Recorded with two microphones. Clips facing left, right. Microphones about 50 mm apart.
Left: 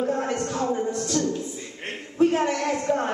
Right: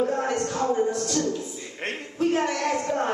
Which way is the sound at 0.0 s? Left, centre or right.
Centre.